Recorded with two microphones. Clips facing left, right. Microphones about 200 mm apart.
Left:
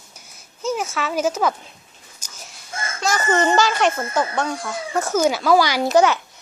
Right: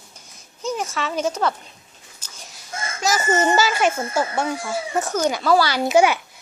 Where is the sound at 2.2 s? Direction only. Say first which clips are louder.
Left 1 dB; 10° left (ahead or behind).